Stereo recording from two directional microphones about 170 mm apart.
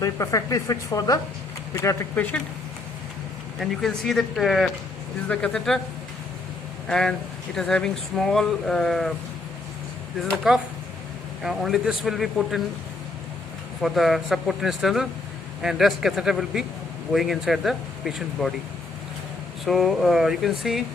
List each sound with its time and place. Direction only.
0.0 s speech: 20° left (ahead or behind)
3.6 s speech: centre (ahead or behind)
6.8 s speech: 5° left (ahead or behind)
10.2 s speech: centre (ahead or behind)
13.8 s speech: centre (ahead or behind)
19.6 s speech: centre (ahead or behind)